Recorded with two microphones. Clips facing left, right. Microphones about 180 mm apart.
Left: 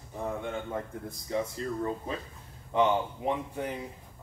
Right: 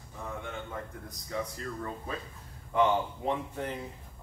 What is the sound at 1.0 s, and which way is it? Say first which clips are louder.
Speech: left 3 dB; 25° left (ahead or behind).